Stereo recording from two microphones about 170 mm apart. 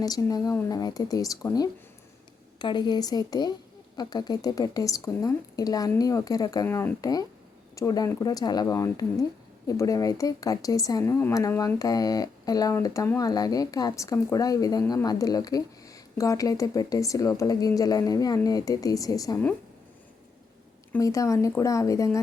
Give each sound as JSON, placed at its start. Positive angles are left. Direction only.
{"t": 0.0, "sound": "speech", "side_deg": 20}
{"t": 20.9, "sound": "speech", "side_deg": 20}